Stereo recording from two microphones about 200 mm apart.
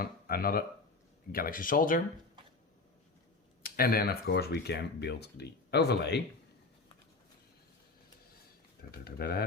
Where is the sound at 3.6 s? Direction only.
50° left (ahead or behind).